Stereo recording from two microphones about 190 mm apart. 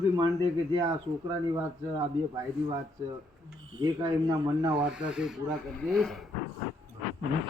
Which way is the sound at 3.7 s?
25° right (ahead or behind).